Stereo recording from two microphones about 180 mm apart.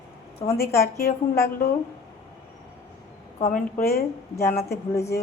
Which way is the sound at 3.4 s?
50° left (ahead or behind).